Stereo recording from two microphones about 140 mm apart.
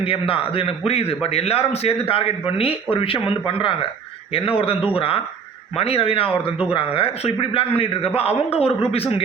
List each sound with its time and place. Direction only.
0.0 s a man's voice: 40° left (ahead or behind)